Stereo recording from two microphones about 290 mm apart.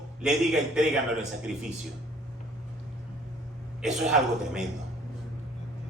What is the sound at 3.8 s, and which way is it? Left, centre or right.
Speech, centre.